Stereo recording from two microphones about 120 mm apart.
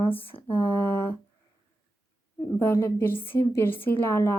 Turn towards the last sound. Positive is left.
turn(degrees=20)  # may be behind; listen again after turning